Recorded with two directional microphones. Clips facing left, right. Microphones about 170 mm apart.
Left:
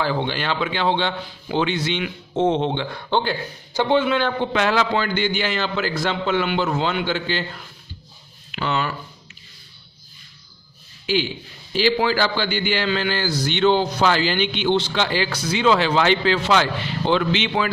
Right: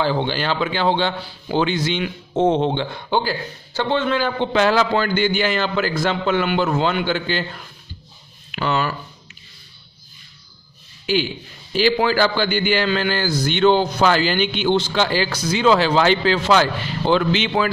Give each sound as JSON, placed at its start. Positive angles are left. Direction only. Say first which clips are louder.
{"t": 0.0, "sound": "a man's voice", "louder": "right 2 dB", "side_deg": -30}
{"t": 3.1, "sound": "speech", "louder": "even", "side_deg": -5}
{"t": 3.7, "sound": "speech", "louder": "left 2 dB", "side_deg": 15}
{"t": 4.5, "sound": "a man's voice", "louder": "right 3 dB", "side_deg": -35}
{"t": 8.5, "sound": "speech", "louder": "right 2 dB", "side_deg": -45}
{"t": 11.7, "sound": "a man's voice", "louder": "right 2 dB", "side_deg": -50}